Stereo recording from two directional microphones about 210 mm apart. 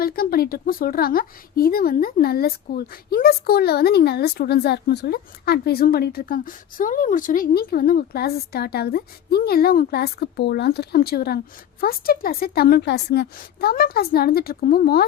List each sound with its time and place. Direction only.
0.0 s a woman's voice: 45° left (ahead or behind)